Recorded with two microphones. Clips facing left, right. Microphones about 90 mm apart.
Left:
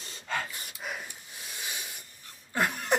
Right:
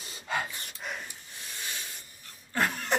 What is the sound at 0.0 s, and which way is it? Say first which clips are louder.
Dog: right 1 dB; 5° right (ahead or behind).